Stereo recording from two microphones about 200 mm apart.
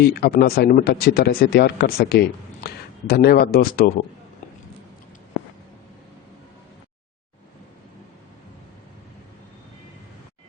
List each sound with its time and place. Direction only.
0.0 s speech: 50° left (ahead or behind)